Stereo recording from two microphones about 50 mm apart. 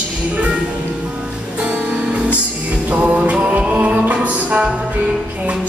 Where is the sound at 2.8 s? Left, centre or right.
Right.